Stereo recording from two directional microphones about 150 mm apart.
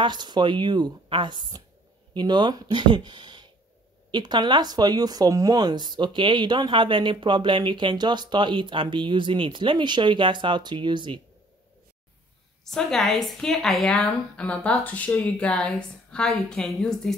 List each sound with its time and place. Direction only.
0.0 s speech: 30° right (ahead or behind)
12.6 s a woman's voice: centre (ahead or behind)